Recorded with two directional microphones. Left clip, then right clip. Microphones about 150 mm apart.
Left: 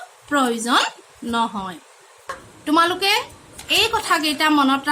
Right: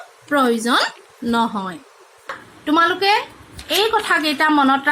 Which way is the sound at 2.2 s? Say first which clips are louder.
Right 2 dB; 10° right (ahead or behind).